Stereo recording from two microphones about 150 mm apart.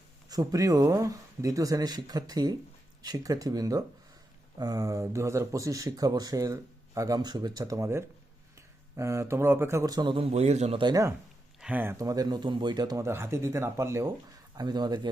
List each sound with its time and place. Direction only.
0.3 s speech: 25° right (ahead or behind)
10.3 s a man's voice: 45° right (ahead or behind)
10.8 s speech: 25° right (ahead or behind)
11.6 s speech: 10° right (ahead or behind); by 15.1 s 30° right (ahead or behind)